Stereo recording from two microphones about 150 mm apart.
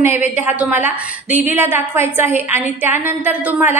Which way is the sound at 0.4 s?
10° right (ahead or behind).